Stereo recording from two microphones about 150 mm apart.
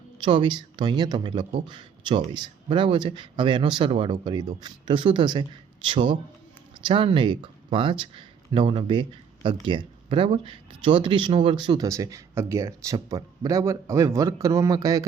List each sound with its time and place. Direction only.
0.2 s speech: 35° right (ahead or behind)